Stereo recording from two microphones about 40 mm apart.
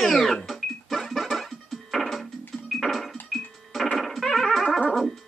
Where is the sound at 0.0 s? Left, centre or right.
Centre.